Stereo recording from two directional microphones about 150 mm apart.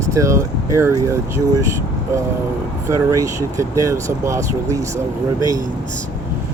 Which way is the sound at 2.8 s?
20° right (ahead or behind).